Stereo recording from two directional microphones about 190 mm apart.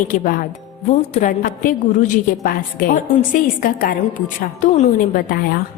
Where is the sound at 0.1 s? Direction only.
45° left (ahead or behind).